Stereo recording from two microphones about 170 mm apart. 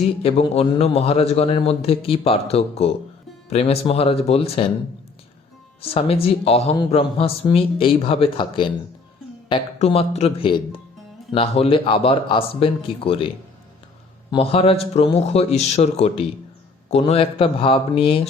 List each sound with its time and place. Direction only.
0.0 s speech: 35° left (ahead or behind)
5.8 s speech: 35° left (ahead or behind)